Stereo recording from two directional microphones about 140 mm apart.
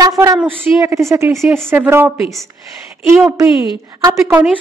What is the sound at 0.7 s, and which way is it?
A woman's voice, 25° right (ahead or behind).